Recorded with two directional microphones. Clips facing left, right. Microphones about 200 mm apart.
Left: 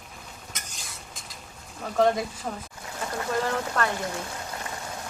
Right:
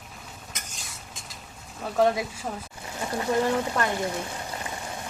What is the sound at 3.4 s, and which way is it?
Speech, 15° right (ahead or behind).